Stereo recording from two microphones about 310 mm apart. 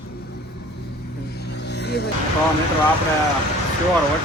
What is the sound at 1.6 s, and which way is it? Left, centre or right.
Music, left.